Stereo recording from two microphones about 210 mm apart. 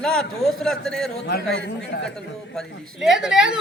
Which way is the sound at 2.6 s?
Centre (ahead or behind).